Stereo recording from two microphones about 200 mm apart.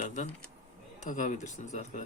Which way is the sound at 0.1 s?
35° left (ahead or behind).